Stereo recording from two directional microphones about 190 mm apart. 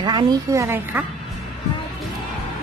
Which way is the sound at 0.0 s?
20° right (ahead or behind).